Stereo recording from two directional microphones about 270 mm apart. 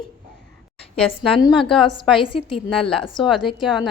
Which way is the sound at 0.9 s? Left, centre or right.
Centre.